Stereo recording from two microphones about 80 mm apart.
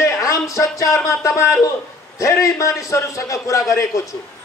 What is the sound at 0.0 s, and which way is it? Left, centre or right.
A man's voice, left.